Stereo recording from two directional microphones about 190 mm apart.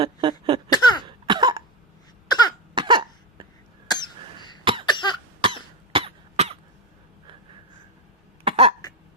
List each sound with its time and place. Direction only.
0.0 s a sound: 25° right (ahead or behind)
0.7 s cough: 20° left (ahead or behind)
1.0 s cough: 25° right (ahead or behind)
2.7 s cough: 25° right (ahead or behind)
3.8 s cough: 25° left (ahead or behind)
4.6 s cough: 25° right (ahead or behind)
4.9 s cough: 25° left (ahead or behind)
5.4 s cough: 25° right (ahead or behind)
8.4 s throat clearing: 30° right (ahead or behind)